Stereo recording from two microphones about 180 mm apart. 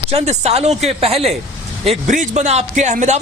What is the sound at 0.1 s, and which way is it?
A man's voice, 35° right (ahead or behind).